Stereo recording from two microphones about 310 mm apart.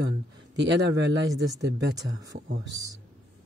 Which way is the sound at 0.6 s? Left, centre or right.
Right.